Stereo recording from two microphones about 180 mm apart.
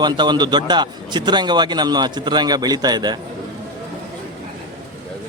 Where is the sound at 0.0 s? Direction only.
25° right (ahead or behind).